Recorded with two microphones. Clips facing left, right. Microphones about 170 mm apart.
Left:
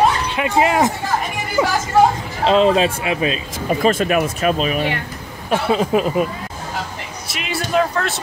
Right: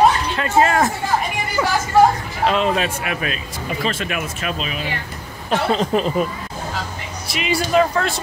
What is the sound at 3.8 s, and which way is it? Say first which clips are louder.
Speech: left 8 dB; 40° left (ahead or behind).